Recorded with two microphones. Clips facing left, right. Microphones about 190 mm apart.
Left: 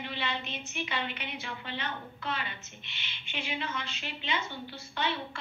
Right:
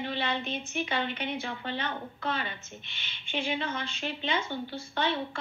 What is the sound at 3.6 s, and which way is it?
A woman's voice, 45° right (ahead or behind).